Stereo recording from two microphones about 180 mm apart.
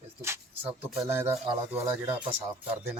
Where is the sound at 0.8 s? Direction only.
5° right (ahead or behind).